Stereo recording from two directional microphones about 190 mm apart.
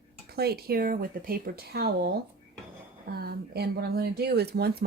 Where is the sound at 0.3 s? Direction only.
55° right (ahead or behind).